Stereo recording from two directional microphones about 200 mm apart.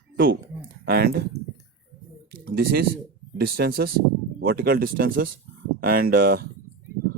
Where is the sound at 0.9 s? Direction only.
50° right (ahead or behind).